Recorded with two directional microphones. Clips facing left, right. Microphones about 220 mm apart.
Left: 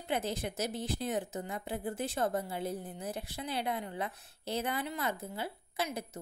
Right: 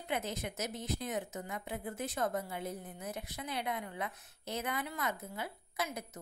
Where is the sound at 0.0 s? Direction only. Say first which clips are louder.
Left 3 dB; 30° left (ahead or behind).